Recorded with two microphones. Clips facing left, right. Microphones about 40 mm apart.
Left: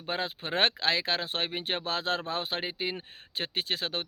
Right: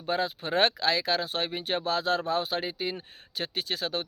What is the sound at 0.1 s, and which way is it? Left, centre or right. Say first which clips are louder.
Speech: right 4 dB; left.